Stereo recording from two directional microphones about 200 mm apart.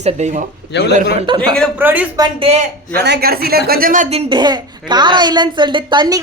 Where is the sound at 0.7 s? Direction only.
55° left (ahead or behind).